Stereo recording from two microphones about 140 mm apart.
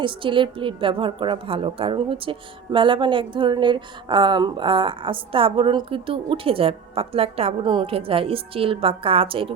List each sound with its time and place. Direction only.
0.0 s a woman's voice: 35° right (ahead or behind)